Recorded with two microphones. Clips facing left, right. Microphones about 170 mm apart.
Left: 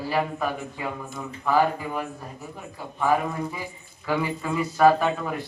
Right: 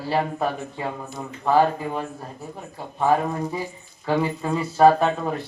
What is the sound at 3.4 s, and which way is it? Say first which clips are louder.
Speech: right 3 dB; 40° right (ahead or behind).